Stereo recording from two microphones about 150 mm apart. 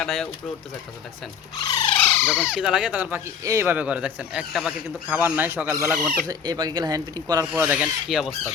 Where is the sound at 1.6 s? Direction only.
30° left (ahead or behind).